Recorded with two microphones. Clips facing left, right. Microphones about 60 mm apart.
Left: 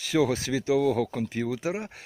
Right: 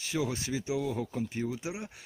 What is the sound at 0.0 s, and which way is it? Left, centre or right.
Speech, left.